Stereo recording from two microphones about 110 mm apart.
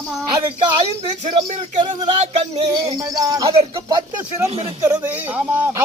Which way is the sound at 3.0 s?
30° right (ahead or behind).